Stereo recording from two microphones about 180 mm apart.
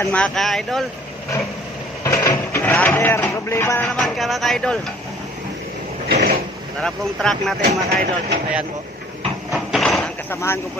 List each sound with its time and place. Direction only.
0.0 s speech: 5° left (ahead or behind)
2.0 s speech: 15° left (ahead or behind)
3.8 s speech: centre (ahead or behind)
6.0 s a sound: 60° right (ahead or behind)
6.8 s speech: 5° left (ahead or behind)
9.5 s vehicle: centre (ahead or behind)